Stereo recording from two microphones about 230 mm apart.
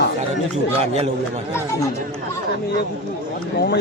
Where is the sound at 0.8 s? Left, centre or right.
Right.